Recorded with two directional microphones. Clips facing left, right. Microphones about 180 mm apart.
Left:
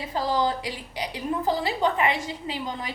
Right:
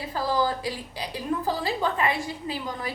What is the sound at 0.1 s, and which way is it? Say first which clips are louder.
A woman's voice: left 1 dB; 20° left (ahead or behind).